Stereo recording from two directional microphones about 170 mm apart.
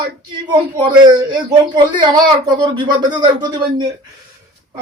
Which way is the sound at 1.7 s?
25° right (ahead or behind).